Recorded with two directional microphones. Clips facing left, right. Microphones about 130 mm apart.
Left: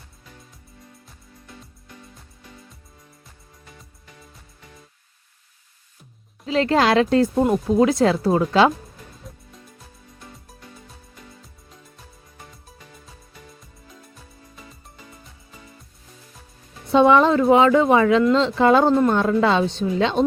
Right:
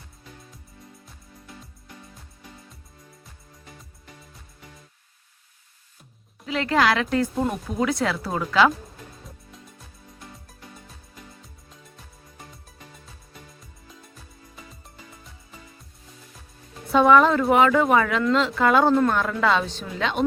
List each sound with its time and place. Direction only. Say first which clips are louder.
6.4 s speech: left 3 dB; 30° left (ahead or behind)
16.9 s music: left 2 dB; 25° left (ahead or behind)
17.5 s speech: left 4 dB; 25° left (ahead or behind)